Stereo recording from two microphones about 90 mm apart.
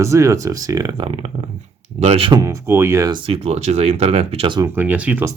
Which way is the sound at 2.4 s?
30° right (ahead or behind).